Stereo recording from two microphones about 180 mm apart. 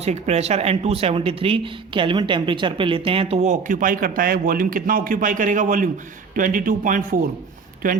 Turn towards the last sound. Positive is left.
turn(degrees=-50)  # may be behind; listen again after turning